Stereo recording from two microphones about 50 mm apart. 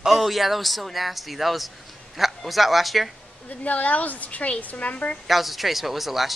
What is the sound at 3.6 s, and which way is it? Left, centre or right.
A woman's voice, left.